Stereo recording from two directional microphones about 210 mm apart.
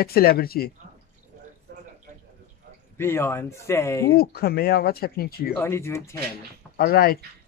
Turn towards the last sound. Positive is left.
turn(degrees=45)  # may be behind; listen again after turning